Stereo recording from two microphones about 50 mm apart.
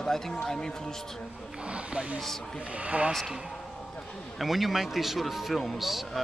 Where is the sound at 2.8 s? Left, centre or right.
Right.